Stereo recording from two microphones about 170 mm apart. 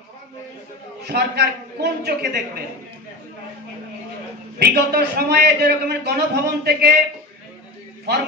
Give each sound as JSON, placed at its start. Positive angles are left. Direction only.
{"t": 1.0, "sound": "a man's voice", "side_deg": -70}
{"t": 4.6, "sound": "a man's voice", "side_deg": -70}